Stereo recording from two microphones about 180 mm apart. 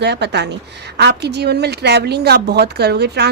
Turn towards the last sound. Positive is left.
turn(degrees=-65)  # may be behind; listen again after turning